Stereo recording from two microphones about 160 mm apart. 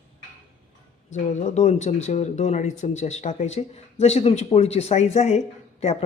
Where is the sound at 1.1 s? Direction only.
45° left (ahead or behind).